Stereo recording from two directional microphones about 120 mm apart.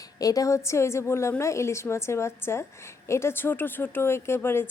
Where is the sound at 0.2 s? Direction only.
30° left (ahead or behind).